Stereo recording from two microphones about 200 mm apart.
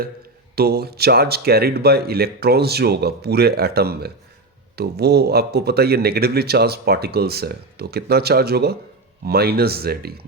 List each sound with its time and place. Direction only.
0.5 s speech: 50° right (ahead or behind)